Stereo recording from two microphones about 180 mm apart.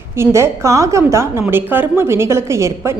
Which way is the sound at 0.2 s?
15° right (ahead or behind).